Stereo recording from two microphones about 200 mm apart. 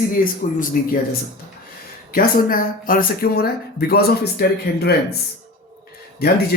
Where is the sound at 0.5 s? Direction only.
40° left (ahead or behind).